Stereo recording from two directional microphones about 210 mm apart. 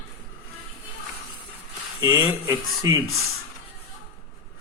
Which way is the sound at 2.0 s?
15° right (ahead or behind).